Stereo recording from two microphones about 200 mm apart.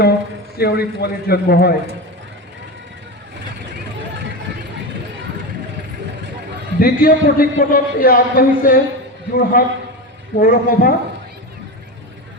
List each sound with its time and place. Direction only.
0.5 s a man's voice: 50° left (ahead or behind)
6.7 s a man's voice: 45° left (ahead or behind)